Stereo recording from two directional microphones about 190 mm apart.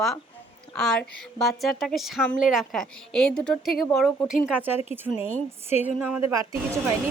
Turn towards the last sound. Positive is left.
turn(degrees=-10)  # may be behind; listen again after turning